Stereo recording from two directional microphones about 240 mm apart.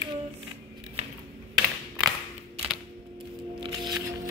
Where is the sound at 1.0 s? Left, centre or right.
Right.